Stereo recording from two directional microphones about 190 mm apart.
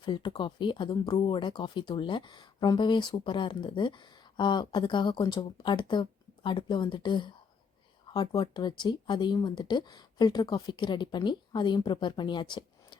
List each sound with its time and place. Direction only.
0.0 s speech: 25° left (ahead or behind)